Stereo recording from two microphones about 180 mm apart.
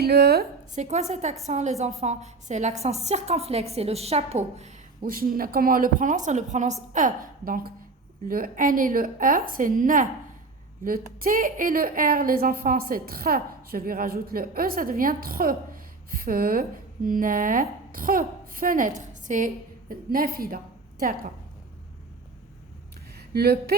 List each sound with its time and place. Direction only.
0.0 s a woman's voice: 60° right (ahead or behind)
0.8 s a woman's voice: 40° right (ahead or behind)
5.0 s a woman's voice: 55° right (ahead or behind)
23.1 s speech: 60° right (ahead or behind)